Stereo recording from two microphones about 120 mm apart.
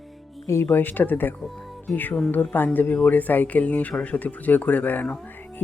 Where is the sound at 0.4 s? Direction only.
20° left (ahead or behind).